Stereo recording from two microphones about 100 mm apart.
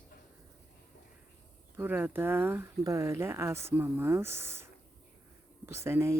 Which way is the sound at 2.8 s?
30° right (ahead or behind).